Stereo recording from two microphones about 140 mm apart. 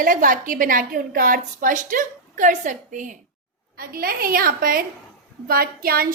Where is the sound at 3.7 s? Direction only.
90° right.